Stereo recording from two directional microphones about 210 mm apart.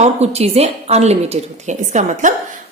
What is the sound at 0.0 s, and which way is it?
A woman's voice, 30° right (ahead or behind).